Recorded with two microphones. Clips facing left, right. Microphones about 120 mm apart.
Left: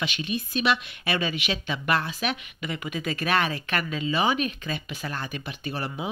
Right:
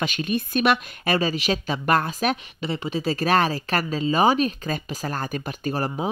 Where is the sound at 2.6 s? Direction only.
30° right (ahead or behind).